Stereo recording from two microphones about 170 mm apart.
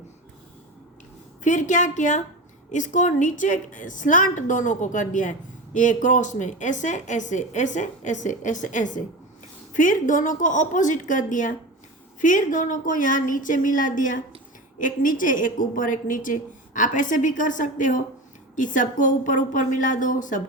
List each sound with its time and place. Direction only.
1.5 s a woman's voice: 50° left (ahead or behind)